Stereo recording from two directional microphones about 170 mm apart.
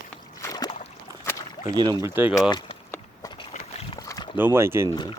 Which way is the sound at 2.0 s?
15° right (ahead or behind).